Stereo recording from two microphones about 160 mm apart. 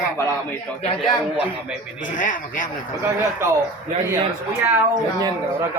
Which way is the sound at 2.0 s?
55° left (ahead or behind).